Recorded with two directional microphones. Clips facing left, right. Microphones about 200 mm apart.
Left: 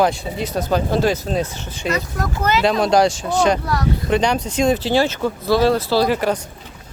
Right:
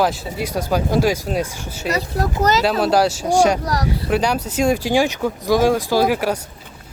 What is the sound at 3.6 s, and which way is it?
Speech, 40° right (ahead or behind).